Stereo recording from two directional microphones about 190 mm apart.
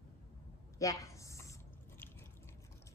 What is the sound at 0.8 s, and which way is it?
Chewing, 15° left (ahead or behind).